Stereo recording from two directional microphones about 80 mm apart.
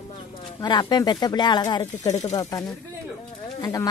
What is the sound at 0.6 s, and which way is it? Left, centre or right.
Speech, left.